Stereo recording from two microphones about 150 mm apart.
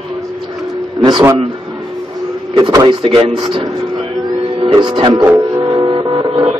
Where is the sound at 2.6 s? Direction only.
30° right (ahead or behind).